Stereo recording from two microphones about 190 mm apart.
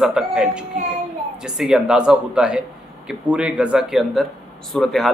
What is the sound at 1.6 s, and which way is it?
Speech, 5° right (ahead or behind).